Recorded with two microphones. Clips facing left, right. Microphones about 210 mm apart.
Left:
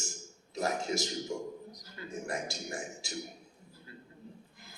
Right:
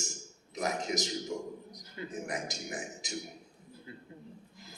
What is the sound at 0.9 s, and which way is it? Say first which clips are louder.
A man's voice: even; 15° right (ahead or behind).